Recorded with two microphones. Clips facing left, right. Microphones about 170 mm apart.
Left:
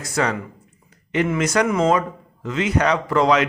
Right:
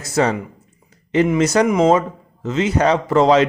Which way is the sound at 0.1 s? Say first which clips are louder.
Right 5 dB; 25° right (ahead or behind).